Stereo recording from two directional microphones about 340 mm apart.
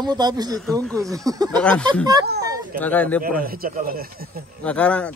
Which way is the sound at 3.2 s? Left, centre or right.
Right.